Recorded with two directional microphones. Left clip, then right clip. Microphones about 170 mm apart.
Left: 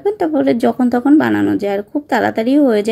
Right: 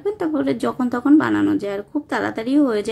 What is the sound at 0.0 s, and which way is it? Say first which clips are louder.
A woman's voice: left 7 dB; 15° left (ahead or behind).